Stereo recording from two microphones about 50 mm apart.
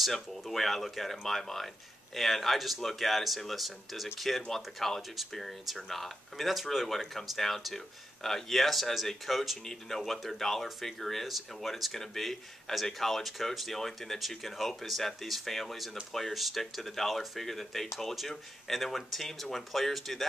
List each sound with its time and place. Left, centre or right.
0.0 s speech: centre